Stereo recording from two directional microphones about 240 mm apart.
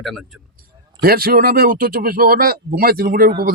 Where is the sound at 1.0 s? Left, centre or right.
Right.